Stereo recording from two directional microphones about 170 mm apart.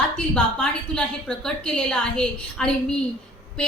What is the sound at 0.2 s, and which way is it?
A woman's voice, 5° left (ahead or behind).